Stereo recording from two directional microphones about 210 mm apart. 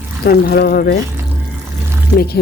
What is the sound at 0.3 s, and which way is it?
Speech, 50° left (ahead or behind).